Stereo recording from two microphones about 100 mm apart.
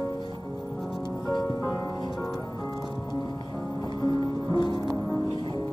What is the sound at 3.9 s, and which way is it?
Music, 45° left (ahead or behind).